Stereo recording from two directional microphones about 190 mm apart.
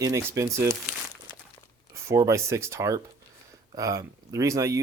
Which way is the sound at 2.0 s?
15° right (ahead or behind).